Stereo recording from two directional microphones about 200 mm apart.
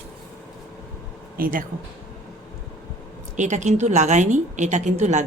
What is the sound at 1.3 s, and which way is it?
Speech, 45° right (ahead or behind).